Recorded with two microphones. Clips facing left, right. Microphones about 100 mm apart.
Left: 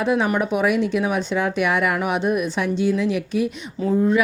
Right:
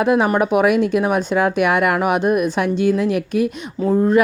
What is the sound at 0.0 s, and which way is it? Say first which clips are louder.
A woman's voice: right 4 dB; 55° right (ahead or behind).